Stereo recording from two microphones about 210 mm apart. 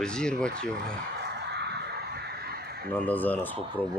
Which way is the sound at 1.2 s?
50° right (ahead or behind).